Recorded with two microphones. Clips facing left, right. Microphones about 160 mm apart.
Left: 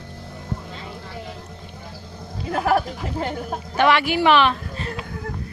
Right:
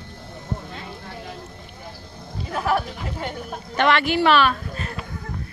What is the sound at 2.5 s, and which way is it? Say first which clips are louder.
Speech: left 3 dB; 45° left (ahead or behind).